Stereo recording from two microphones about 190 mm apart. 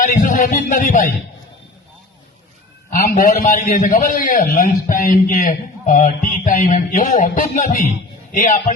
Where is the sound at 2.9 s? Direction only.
45° left (ahead or behind).